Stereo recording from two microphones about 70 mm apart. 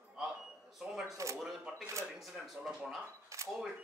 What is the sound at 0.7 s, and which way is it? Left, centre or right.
Camera, centre.